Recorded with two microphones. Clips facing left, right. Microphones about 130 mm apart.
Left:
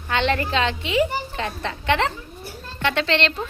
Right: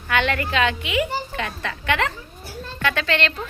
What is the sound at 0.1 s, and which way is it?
A woman's voice, 25° left (ahead or behind).